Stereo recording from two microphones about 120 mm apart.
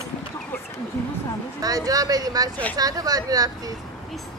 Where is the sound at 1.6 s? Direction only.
30° right (ahead or behind).